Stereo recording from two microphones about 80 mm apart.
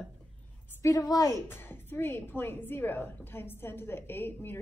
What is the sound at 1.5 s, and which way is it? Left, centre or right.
A woman's voice, left.